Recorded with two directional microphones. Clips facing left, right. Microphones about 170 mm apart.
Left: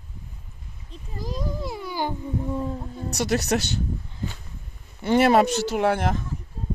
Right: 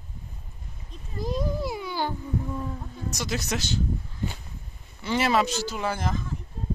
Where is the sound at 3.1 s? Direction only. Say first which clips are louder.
Left 7 dB; 65° left (ahead or behind).